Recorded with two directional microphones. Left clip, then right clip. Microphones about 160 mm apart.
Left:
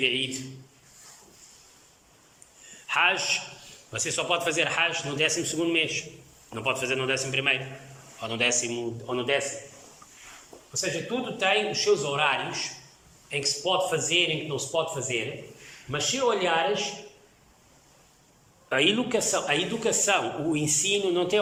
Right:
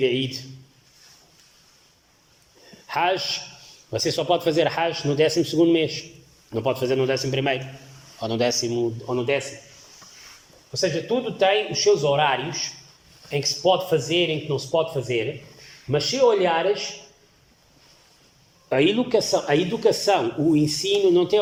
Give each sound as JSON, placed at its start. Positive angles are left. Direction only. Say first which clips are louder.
{"t": 0.0, "sound": "a man's voice", "louder": "right 3 dB", "side_deg": -40}
{"t": 2.8, "sound": "a man's voice", "louder": "right 1 dB", "side_deg": -40}
{"t": 10.8, "sound": "a man's voice", "louder": "right 6 dB", "side_deg": -45}
{"t": 18.7, "sound": "a man's voice", "louder": "right 4 dB", "side_deg": -30}